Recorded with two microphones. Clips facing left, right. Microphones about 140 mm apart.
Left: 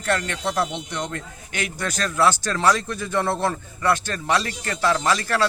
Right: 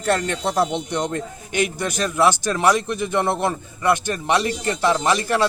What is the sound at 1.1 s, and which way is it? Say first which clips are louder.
Speech: right 7 dB; 20° right (ahead or behind).